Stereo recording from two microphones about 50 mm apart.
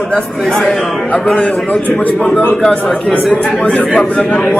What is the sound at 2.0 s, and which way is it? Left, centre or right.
Speech, left.